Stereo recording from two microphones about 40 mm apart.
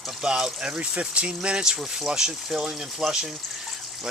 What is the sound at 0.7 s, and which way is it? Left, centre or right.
Speech, right.